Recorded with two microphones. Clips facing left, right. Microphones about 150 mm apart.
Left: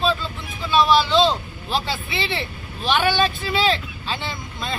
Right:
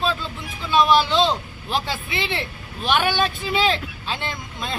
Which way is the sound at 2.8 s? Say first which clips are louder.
Left 1 dB; 15° right (ahead or behind).